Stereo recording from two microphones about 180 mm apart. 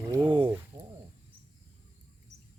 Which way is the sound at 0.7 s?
30° right (ahead or behind).